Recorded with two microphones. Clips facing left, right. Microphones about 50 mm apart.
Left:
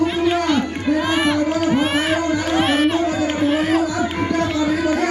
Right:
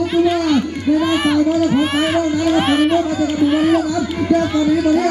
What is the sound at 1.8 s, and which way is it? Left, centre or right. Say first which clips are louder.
Baby cry: right 2 dB; centre.